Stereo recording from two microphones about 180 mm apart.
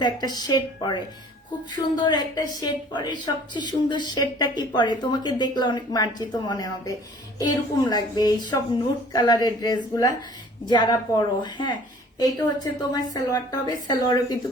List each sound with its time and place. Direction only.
0.0 s a woman's voice: 25° left (ahead or behind)